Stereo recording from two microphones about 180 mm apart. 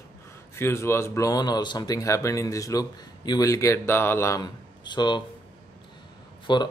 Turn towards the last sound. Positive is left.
turn(degrees=25)  # may be behind; listen again after turning